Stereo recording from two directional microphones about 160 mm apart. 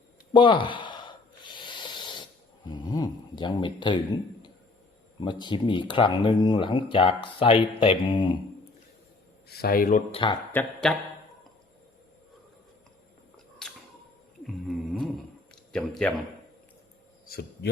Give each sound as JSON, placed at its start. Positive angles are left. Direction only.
{"t": 0.3, "sound": "snort", "side_deg": 30}
{"t": 2.6, "sound": "speech", "side_deg": 30}
{"t": 5.2, "sound": "speech", "side_deg": 30}
{"t": 9.6, "sound": "speech", "side_deg": 70}
{"t": 10.1, "sound": "speech", "side_deg": 35}
{"t": 10.5, "sound": "a man's voice", "side_deg": 10}
{"t": 13.6, "sound": "a sound", "side_deg": 5}
{"t": 15.7, "sound": "a man's voice", "side_deg": 5}